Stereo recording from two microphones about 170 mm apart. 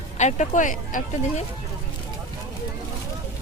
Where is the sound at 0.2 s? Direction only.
45° left (ahead or behind).